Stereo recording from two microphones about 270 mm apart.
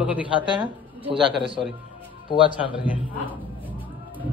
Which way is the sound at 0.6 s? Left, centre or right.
Centre.